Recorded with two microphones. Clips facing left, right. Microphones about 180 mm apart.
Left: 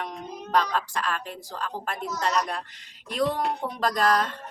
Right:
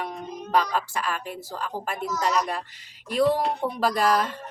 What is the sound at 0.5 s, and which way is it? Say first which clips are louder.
A woman's voice: right 1 dB; 5° right (ahead or behind).